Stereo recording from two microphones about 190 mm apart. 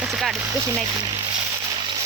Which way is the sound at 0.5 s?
15° right (ahead or behind).